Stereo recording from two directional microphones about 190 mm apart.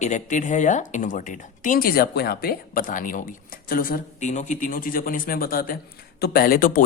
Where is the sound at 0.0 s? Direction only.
40° left (ahead or behind).